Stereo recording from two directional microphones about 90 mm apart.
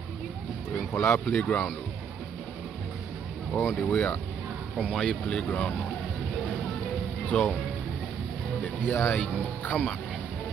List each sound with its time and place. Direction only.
0.9 s speech: 20° left (ahead or behind)
3.6 s speech: 15° left (ahead or behind)
7.2 s speech: 10° left (ahead or behind)
8.6 s speech: 25° left (ahead or behind)